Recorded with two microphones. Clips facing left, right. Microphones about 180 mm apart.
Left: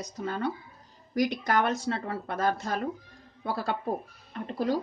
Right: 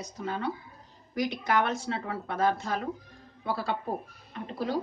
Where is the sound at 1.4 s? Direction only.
40° left (ahead or behind).